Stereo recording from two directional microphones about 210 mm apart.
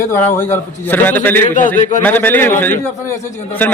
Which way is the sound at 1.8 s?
35° left (ahead or behind).